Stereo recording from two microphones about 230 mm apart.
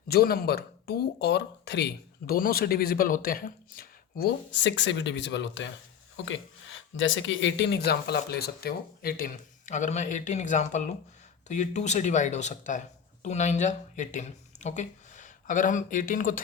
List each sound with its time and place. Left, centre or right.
0.1 s speech: left